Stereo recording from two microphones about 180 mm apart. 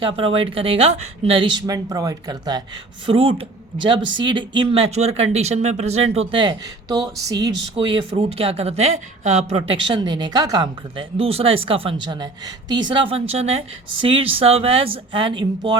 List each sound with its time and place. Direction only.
0.0 s speech: 30° right (ahead or behind)